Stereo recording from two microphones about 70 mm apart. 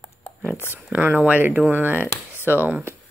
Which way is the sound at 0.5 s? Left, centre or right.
Left.